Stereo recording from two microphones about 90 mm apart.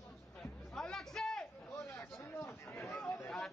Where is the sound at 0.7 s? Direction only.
5° left (ahead or behind).